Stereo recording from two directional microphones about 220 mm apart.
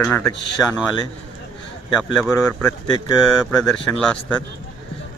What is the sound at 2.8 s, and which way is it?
Speech, 20° left (ahead or behind).